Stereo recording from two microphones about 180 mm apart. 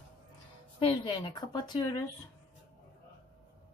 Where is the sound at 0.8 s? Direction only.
30° left (ahead or behind).